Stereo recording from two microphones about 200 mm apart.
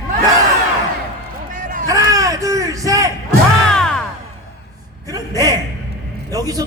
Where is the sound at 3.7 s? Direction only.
5° left (ahead or behind).